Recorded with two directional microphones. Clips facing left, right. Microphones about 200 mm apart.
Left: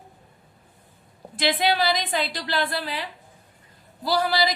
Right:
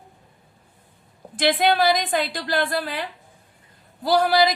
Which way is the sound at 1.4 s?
50° right (ahead or behind).